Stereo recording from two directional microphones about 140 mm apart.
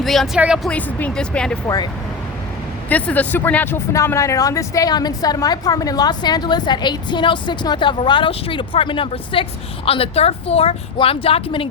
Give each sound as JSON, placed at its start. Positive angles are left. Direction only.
{"t": 0.0, "sound": "speech", "side_deg": 0}
{"t": 0.7, "sound": "speech", "side_deg": 10}
{"t": 1.6, "sound": "speech", "side_deg": 25}
{"t": 2.9, "sound": "speech", "side_deg": 10}